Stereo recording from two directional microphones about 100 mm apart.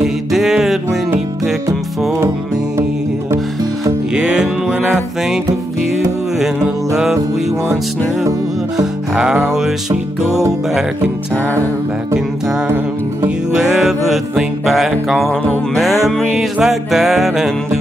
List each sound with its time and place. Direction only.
0.0 s music: 5° right (ahead or behind)
4.1 s music: 10° right (ahead or behind)
8.2 s music: 35° right (ahead or behind)
9.1 s music: 5° right (ahead or behind)
13.6 s music: 5° right (ahead or behind)